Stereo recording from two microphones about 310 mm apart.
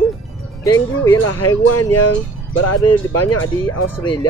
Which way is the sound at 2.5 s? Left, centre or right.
Left.